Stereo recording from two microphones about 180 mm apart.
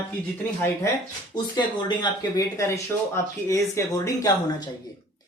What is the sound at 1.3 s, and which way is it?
Speech, 25° left (ahead or behind).